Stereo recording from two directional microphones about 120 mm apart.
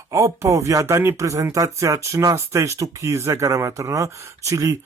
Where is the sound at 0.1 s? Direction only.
25° right (ahead or behind).